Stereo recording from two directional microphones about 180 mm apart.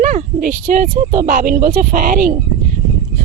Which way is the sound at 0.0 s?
45° right (ahead or behind).